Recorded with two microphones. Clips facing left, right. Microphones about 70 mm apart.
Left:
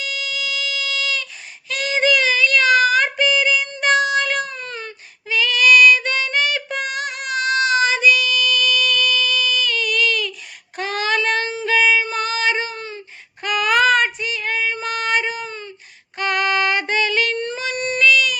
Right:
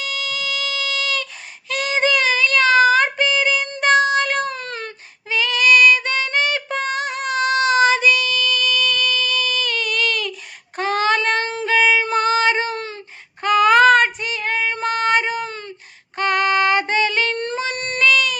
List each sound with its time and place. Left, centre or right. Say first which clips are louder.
0.0 s music: right 1 dB; right
1.7 s child singing: even; right
4.5 s baby cry: right 2 dB; right
5.3 s female singing: left 1 dB; right
10.8 s child singing: right 3 dB; right
11.6 s music: right 1 dB; right
12.7 s a sound: right 3 dB; right
13.4 s child singing: right 5 dB; right
15.4 s a sound: right 1 dB; right
16.1 s music: right 2 dB; right
17.3 s a sound: right 1 dB; right